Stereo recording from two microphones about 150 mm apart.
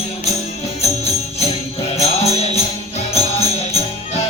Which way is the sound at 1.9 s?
45° left (ahead or behind).